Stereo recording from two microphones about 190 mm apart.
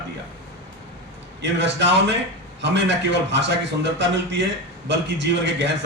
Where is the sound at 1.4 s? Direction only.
70° right (ahead or behind).